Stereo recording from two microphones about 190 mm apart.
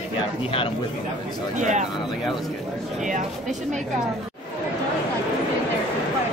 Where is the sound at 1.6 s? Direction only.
40° right (ahead or behind).